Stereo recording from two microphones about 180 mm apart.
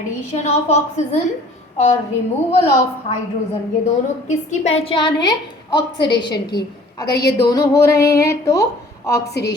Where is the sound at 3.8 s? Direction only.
35° left (ahead or behind).